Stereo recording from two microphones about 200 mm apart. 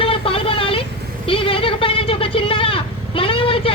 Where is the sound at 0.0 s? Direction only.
25° left (ahead or behind).